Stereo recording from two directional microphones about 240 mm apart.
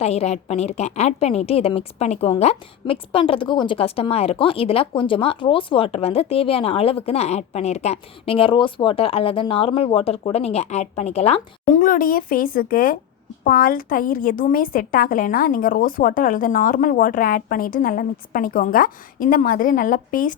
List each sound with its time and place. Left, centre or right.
0.0 s a woman's voice: left